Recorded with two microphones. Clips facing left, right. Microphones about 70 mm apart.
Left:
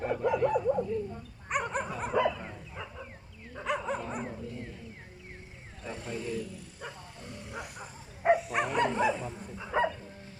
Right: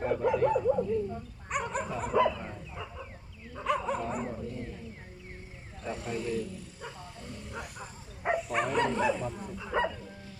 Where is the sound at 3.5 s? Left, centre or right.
Centre.